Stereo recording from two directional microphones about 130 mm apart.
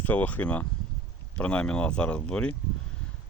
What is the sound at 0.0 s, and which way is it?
Speech, 10° left (ahead or behind).